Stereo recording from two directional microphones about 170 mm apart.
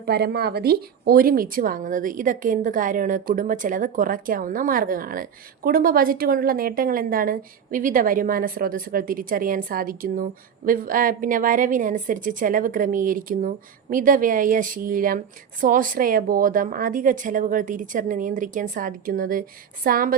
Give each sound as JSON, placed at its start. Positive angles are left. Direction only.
{"t": 0.0, "sound": "a woman's voice", "side_deg": -70}